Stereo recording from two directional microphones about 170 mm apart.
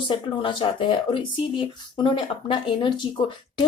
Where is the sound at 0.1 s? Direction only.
30° left (ahead or behind).